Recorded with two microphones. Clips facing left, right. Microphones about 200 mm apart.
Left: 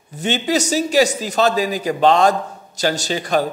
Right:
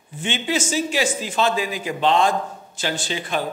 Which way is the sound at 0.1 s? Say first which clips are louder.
Left 5 dB; 40° left (ahead or behind).